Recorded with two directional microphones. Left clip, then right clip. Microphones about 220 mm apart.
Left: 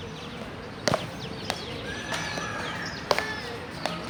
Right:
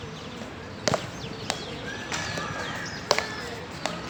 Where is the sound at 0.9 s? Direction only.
10° left (ahead or behind).